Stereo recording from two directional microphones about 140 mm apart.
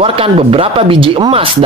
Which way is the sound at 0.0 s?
40° right (ahead or behind).